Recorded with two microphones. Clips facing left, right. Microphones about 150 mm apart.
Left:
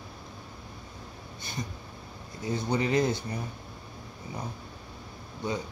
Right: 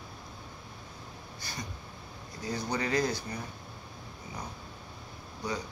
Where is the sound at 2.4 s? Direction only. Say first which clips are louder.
Left 4 dB; 25° left (ahead or behind).